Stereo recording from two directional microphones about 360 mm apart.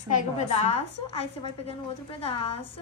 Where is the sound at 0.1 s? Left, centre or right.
Centre.